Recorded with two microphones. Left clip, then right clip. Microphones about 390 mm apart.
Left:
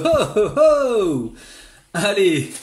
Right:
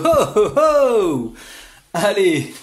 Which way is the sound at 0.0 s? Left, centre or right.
Centre.